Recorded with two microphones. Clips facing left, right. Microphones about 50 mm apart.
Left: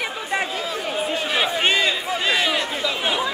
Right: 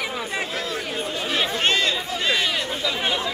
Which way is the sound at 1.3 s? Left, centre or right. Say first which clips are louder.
Left 1 dB; centre.